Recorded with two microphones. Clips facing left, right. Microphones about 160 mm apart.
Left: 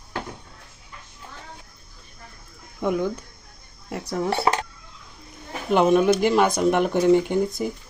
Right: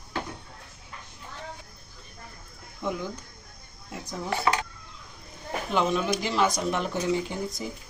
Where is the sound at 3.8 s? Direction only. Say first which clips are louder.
Left 9 dB; 70° left (ahead or behind).